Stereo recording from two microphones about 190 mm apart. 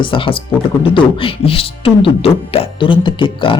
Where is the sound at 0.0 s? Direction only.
25° left (ahead or behind).